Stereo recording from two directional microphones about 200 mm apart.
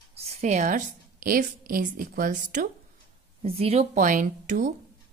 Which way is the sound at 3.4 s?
30° right (ahead or behind).